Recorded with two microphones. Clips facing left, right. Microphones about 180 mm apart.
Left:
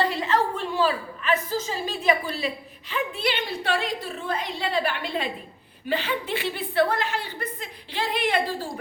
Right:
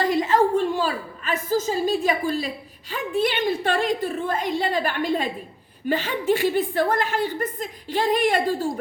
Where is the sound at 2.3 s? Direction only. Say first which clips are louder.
Right 3 dB; 40° right (ahead or behind).